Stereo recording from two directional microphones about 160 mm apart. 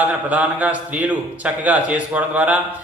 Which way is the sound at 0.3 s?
10° right (ahead or behind).